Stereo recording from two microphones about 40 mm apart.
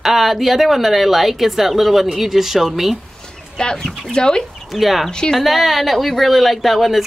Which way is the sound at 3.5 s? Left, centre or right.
Centre.